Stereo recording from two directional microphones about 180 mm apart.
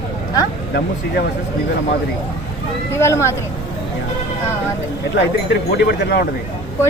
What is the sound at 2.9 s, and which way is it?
Speech, 15° left (ahead or behind).